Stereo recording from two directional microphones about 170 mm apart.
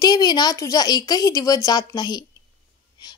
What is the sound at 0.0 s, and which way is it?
A woman's voice, 25° left (ahead or behind).